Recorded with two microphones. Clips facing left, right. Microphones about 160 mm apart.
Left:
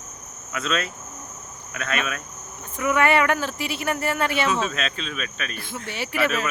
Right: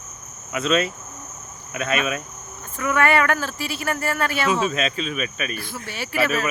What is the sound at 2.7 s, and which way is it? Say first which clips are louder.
Speech: even; 15° left (ahead or behind).